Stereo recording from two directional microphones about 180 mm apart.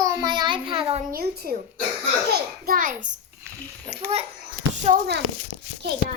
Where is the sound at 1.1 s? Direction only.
60° right (ahead or behind).